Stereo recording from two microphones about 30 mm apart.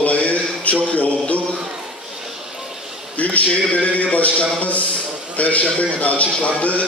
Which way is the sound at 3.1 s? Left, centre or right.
Left.